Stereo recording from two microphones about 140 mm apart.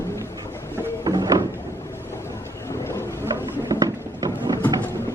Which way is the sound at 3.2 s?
25° right (ahead or behind).